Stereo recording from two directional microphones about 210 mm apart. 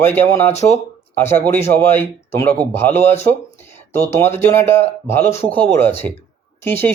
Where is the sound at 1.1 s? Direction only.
10° left (ahead or behind).